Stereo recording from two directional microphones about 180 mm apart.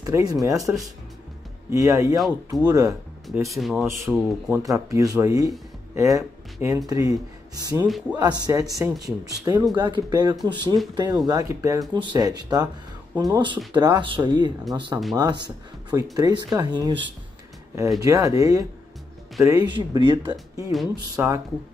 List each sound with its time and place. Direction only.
0.0 s speech: 20° right (ahead or behind)
2.1 s speech: centre (ahead or behind)
2.7 s speech: 20° right (ahead or behind)
3.4 s speech: centre (ahead or behind)
4.6 s speech: 15° right (ahead or behind)
18.0 s speech: 20° right (ahead or behind)